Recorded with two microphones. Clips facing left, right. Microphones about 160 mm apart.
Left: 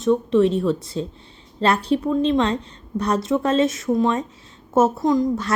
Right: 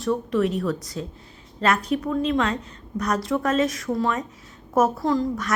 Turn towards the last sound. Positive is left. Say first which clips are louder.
# left 3 dB
turn(degrees=20)  # may be behind; listen again after turning